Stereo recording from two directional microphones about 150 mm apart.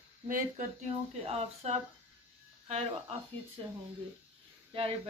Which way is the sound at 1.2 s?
45° right (ahead or behind).